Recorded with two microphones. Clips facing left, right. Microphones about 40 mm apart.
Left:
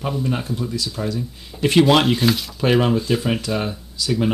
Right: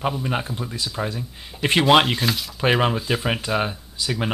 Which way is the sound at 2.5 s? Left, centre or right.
Centre.